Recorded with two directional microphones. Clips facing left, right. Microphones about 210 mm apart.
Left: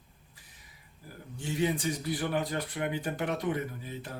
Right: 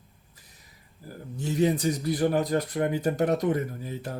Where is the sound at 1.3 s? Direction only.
40° right (ahead or behind).